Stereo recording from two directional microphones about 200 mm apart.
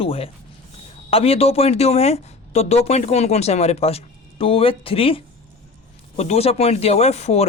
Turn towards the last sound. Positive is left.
turn(degrees=35)  # may be behind; listen again after turning